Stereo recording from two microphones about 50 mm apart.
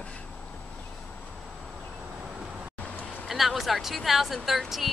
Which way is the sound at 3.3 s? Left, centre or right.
Centre.